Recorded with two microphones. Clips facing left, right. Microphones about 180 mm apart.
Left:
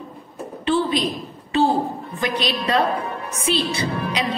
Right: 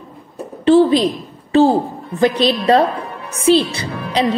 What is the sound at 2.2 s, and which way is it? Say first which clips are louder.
Speech: right 9 dB; 30° right (ahead or behind).